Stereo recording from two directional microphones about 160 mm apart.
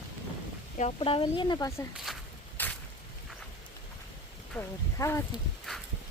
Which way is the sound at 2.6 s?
10° left (ahead or behind).